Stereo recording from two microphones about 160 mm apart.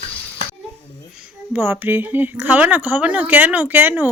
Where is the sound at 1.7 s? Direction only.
15° right (ahead or behind).